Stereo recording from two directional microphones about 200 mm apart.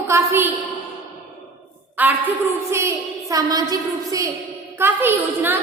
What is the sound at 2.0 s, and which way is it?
A woman's voice, 10° right (ahead or behind).